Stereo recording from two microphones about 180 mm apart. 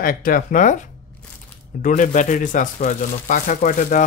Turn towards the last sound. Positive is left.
turn(degrees=45)  # may be behind; listen again after turning